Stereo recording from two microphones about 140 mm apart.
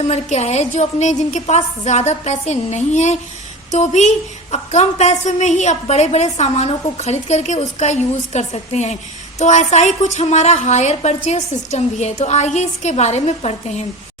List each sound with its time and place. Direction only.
0.1 s a woman's voice: 50° left (ahead or behind)